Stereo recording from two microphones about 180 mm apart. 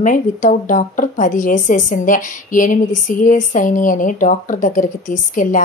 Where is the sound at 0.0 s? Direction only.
45° left (ahead or behind).